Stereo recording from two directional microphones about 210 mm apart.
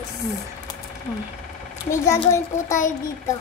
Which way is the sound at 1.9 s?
15° left (ahead or behind).